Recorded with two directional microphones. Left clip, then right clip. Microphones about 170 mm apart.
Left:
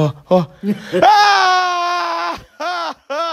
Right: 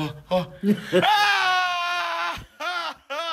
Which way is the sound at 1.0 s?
45° left (ahead or behind).